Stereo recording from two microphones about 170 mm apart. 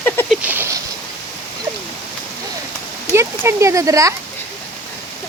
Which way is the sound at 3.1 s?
15° right (ahead or behind).